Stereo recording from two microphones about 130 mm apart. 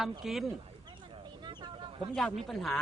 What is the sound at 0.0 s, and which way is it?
Speech, centre (ahead or behind).